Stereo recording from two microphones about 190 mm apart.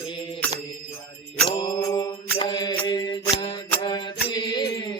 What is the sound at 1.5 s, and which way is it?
Mantra, 25° left (ahead or behind).